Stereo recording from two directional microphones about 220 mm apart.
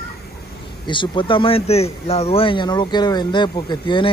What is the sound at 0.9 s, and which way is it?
Speech, 20° left (ahead or behind).